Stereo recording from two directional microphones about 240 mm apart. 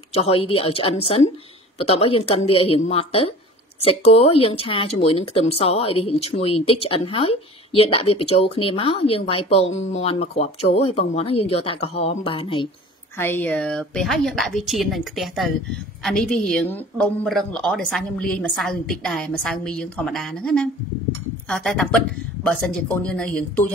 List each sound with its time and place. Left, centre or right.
0.1 s speech: left
13.2 s a woman's voice: centre